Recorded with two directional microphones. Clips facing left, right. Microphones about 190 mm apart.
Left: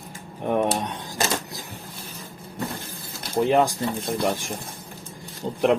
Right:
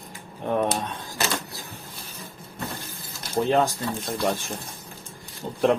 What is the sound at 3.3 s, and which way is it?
Speech, 10° left (ahead or behind).